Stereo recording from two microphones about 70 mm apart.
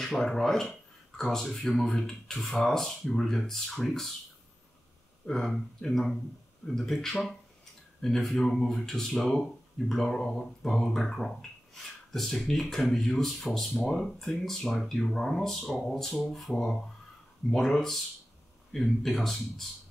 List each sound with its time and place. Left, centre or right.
0.0 s speech: centre
5.2 s speech: centre